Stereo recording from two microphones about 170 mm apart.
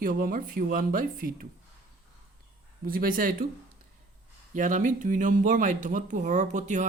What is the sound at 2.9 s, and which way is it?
Speech, 55° right (ahead or behind).